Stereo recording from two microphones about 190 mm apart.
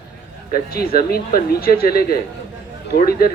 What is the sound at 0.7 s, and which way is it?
Speech, 55° left (ahead or behind).